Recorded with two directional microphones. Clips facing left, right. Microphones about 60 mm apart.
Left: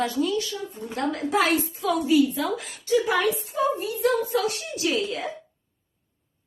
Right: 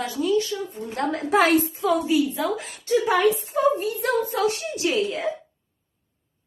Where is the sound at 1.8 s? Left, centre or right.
Right.